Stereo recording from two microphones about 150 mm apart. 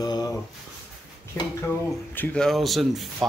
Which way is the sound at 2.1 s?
10° left (ahead or behind).